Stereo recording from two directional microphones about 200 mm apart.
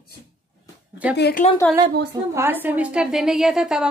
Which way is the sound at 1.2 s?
55° left (ahead or behind).